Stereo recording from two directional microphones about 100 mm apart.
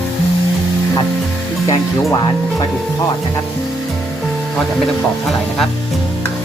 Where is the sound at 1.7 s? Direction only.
40° left (ahead or behind).